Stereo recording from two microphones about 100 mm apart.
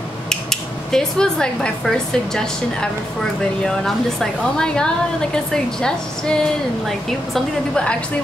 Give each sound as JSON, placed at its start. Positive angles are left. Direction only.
{"t": 0.3, "sound": "speech", "side_deg": 5}